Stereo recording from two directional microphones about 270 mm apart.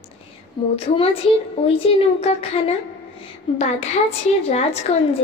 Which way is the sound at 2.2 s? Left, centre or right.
Left.